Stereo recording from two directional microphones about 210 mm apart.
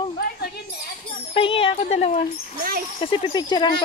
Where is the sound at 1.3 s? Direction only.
25° left (ahead or behind).